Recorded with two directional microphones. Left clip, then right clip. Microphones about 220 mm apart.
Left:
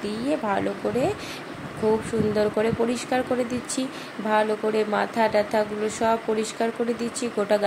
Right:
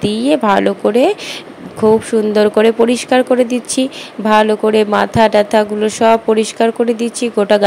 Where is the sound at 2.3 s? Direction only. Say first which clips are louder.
Right 13 dB; 35° right (ahead or behind).